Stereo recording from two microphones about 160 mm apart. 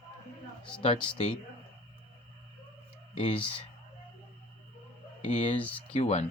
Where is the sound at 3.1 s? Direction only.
35° left (ahead or behind).